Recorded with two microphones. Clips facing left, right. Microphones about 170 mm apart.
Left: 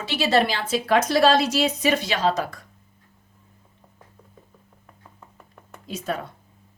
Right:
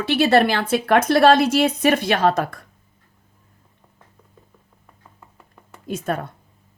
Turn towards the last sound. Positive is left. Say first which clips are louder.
# right 4 dB
turn(degrees=-55)  # may be behind; listen again after turning